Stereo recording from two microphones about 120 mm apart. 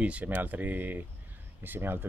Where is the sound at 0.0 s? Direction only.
10° right (ahead or behind).